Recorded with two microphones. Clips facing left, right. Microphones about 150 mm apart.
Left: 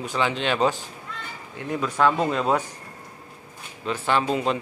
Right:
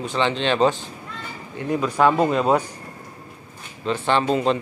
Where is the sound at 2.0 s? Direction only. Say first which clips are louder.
Right 3 dB; 10° right (ahead or behind).